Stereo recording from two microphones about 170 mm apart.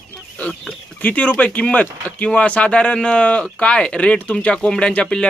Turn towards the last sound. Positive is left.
turn(degrees=5)  # may be behind; listen again after turning